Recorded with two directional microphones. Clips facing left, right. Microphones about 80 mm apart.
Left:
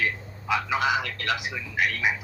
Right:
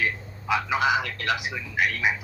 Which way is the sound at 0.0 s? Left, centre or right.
Centre.